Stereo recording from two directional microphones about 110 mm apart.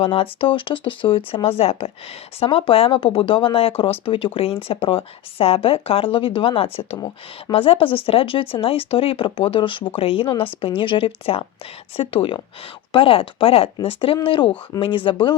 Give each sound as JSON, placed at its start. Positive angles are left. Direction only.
{"t": 0.0, "sound": "speech", "side_deg": 55}